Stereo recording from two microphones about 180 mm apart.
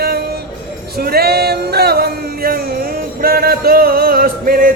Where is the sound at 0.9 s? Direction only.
60° right (ahead or behind).